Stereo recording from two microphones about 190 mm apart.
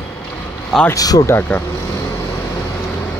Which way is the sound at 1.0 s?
20° left (ahead or behind).